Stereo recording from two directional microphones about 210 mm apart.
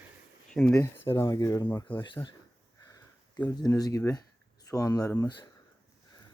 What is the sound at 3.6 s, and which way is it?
Speech, 15° left (ahead or behind).